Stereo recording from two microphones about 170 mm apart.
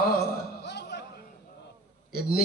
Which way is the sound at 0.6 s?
80° left.